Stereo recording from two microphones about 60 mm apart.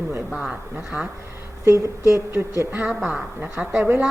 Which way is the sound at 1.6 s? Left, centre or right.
Right.